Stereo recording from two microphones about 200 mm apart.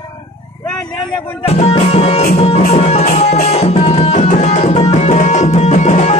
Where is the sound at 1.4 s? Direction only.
35° left (ahead or behind).